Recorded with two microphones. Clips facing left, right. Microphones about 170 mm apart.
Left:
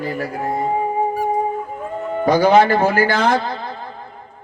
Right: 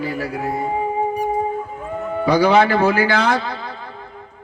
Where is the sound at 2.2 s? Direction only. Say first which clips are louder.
Left 2 dB; 50° left (ahead or behind).